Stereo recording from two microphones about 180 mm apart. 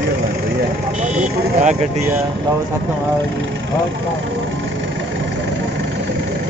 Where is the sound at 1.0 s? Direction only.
40° right (ahead or behind).